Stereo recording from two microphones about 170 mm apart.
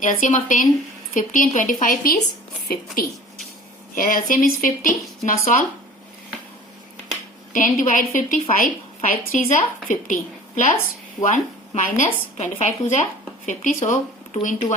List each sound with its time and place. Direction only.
0.0 s a woman's voice: 50° left (ahead or behind)
7.5 s a woman's voice: 50° left (ahead or behind)